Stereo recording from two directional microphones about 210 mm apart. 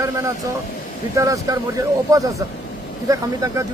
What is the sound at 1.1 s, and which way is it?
Speech, 15° right (ahead or behind).